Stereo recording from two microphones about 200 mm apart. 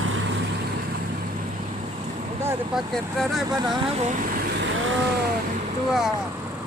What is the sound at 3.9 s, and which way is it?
Speech, 35° right (ahead or behind).